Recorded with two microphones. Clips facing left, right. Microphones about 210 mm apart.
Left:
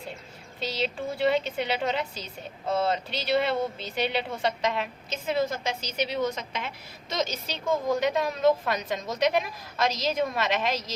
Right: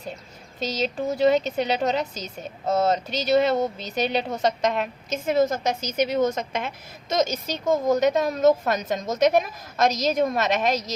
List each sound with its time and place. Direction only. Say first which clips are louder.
0.6 s a woman's voice: right 4 dB; 45° right (ahead or behind)